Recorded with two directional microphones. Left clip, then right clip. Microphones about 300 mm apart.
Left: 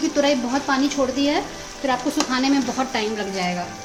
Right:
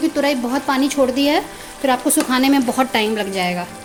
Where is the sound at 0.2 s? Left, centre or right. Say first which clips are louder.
Right 1 dB; centre.